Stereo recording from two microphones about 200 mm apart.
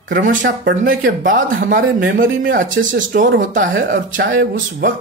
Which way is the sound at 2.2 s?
75° right (ahead or behind).